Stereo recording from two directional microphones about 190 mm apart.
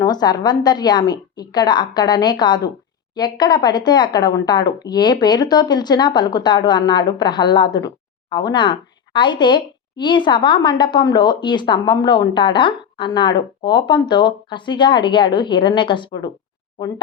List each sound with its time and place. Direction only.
0.0 s speech: 20° left (ahead or behind)